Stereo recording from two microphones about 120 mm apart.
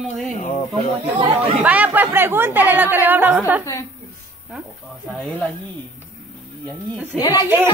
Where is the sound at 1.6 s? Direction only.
10° right (ahead or behind).